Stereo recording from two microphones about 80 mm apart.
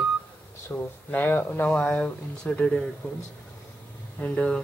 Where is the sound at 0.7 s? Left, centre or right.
Left.